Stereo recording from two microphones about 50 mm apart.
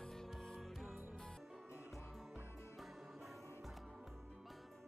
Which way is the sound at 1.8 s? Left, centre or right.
Centre.